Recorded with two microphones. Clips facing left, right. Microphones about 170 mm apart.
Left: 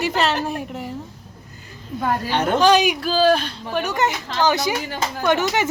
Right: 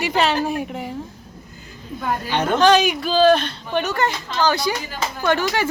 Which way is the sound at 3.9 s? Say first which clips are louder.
Even; 15° left (ahead or behind).